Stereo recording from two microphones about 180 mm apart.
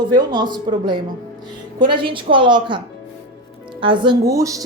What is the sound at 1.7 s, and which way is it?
A woman's voice, 25° right (ahead or behind).